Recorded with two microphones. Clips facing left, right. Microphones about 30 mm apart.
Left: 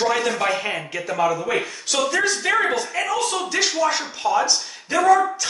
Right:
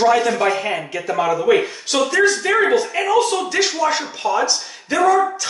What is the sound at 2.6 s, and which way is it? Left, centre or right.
Speech, centre.